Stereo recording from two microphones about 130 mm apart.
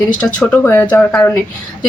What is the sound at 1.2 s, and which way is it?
Speech, 20° left (ahead or behind).